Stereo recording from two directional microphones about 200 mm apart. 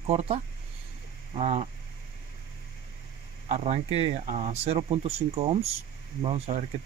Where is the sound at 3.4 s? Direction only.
35° right (ahead or behind).